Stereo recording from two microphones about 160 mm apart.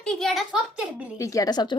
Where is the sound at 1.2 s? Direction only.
20° left (ahead or behind).